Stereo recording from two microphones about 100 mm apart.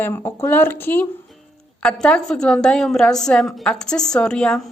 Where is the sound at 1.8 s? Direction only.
10° left (ahead or behind).